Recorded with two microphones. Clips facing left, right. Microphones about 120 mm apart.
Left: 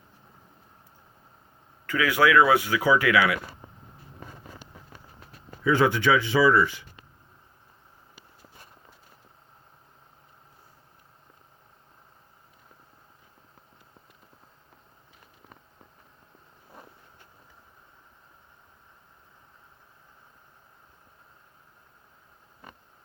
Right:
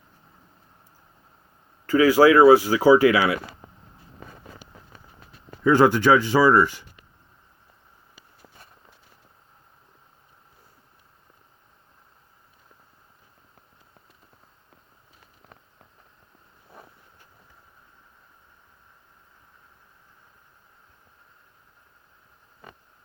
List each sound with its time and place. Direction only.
1.9 s speech: 30° right (ahead or behind)
5.6 s speech: 40° right (ahead or behind)